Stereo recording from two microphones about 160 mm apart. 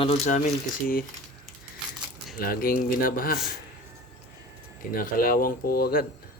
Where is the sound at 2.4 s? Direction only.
65° left (ahead or behind).